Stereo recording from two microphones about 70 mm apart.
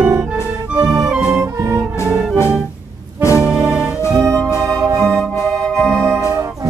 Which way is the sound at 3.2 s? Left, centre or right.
Left.